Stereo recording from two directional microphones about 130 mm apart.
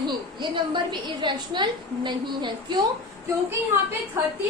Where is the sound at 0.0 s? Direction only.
35° right (ahead or behind).